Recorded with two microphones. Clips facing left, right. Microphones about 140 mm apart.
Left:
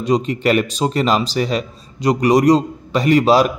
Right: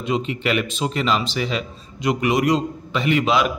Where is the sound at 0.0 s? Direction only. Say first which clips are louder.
Left 6 dB; 40° left (ahead or behind).